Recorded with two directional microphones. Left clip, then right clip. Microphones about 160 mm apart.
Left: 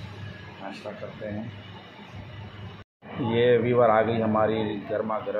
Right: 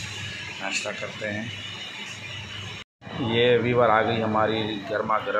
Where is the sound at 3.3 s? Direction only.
Centre (ahead or behind).